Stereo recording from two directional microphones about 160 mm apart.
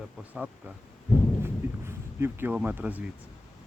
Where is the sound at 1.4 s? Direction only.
15° right (ahead or behind).